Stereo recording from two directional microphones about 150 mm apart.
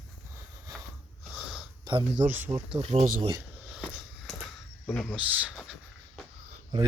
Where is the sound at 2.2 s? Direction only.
15° right (ahead or behind).